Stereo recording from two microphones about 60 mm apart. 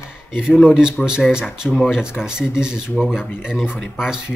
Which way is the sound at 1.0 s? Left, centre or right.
Centre.